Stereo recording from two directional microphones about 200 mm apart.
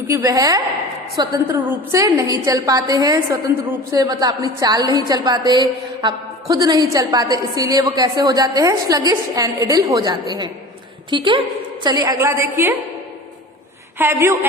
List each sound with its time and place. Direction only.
0.1 s a woman's voice: 15° right (ahead or behind)
14.0 s a woman's voice: 10° right (ahead or behind)